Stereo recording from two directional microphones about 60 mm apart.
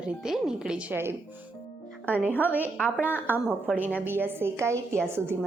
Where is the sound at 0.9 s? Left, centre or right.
Right.